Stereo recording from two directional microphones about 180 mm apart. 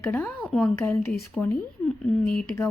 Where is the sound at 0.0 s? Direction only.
10° left (ahead or behind).